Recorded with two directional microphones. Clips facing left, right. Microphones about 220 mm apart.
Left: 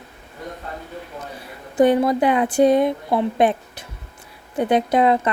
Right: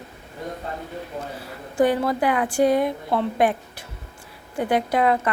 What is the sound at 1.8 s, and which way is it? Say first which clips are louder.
A woman's voice: left 4 dB; 20° left (ahead or behind).